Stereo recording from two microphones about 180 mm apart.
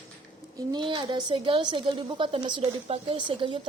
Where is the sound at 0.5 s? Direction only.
25° right (ahead or behind).